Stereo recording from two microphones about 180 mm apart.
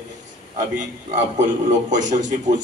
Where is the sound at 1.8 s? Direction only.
45° right (ahead or behind).